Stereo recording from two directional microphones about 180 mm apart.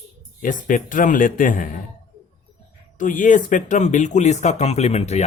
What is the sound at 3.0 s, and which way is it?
Speech, 45° left (ahead or behind).